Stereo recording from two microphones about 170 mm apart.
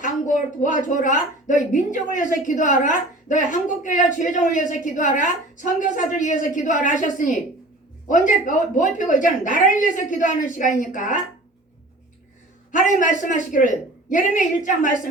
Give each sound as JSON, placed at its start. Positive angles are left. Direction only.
{"t": 0.0, "sound": "a woman's voice", "side_deg": 50}
{"t": 12.7, "sound": "a woman's voice", "side_deg": 50}